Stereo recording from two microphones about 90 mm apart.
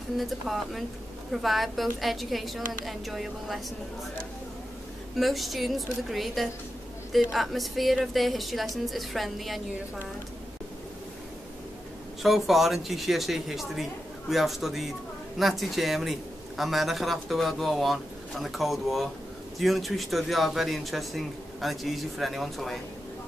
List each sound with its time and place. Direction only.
0.2 s a man's voice: centre (ahead or behind)
5.1 s a man's voice: centre (ahead or behind)
12.2 s a man's voice: centre (ahead or behind)